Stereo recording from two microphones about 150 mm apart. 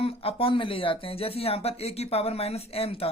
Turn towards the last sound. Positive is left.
turn(degrees=40)  # may be behind; listen again after turning